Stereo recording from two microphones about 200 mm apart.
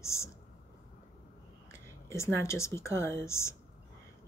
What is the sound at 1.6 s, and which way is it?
Speech, 15° left (ahead or behind).